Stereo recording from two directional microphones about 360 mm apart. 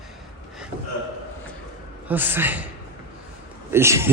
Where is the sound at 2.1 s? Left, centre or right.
Centre.